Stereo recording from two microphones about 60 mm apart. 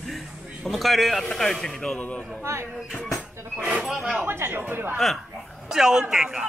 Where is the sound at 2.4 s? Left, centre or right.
Right.